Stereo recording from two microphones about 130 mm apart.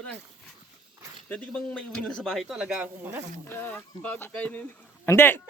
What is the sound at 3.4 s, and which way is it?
Speech, 15° left (ahead or behind).